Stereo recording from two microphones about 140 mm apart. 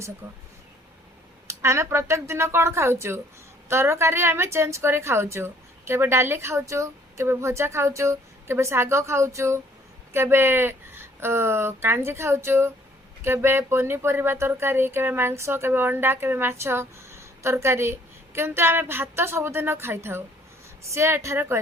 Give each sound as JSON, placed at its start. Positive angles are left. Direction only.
{"t": 0.2, "sound": "speech", "side_deg": -15}
{"t": 1.5, "sound": "a woman's voice", "side_deg": -20}